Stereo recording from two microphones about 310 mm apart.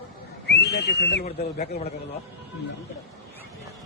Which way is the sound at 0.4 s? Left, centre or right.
Left.